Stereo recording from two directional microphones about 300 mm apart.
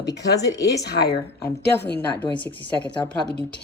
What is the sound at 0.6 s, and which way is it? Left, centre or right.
Speech, left.